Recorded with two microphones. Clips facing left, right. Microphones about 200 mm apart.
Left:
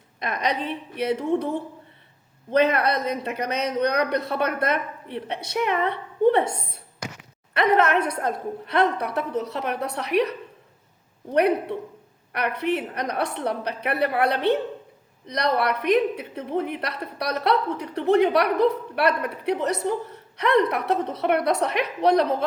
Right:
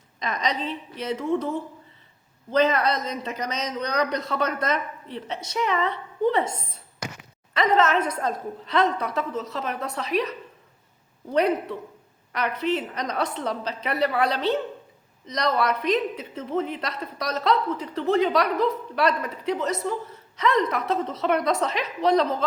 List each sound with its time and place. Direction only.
0.2 s a woman's voice: 55° left (ahead or behind)
2.5 s a woman's voice: 60° left (ahead or behind)
7.5 s a woman's voice: 60° left (ahead or behind)
12.3 s a woman's voice: 60° left (ahead or behind)